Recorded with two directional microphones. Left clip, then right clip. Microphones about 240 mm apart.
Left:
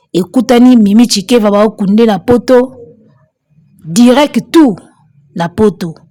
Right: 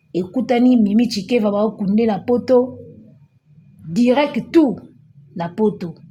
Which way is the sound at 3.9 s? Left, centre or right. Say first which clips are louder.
Left 8 dB; left.